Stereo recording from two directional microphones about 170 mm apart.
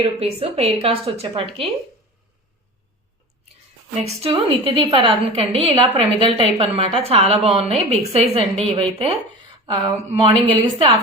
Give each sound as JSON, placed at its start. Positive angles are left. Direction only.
{"t": 0.0, "sound": "a woman's voice", "side_deg": -35}
{"t": 4.0, "sound": "a woman's voice", "side_deg": -35}